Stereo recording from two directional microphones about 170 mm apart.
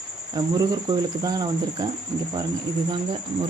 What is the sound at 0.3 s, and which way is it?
Speech, 25° right (ahead or behind).